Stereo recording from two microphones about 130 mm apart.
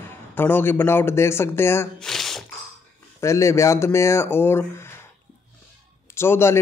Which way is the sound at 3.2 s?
20° left (ahead or behind).